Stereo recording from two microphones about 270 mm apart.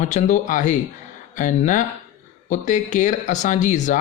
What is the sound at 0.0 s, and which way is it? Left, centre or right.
Speech, left.